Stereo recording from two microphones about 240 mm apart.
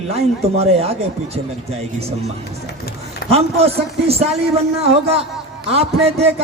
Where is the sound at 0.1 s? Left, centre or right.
Right.